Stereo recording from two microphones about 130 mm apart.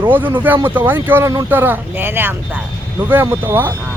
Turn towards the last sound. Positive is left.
turn(degrees=-15)  # may be behind; listen again after turning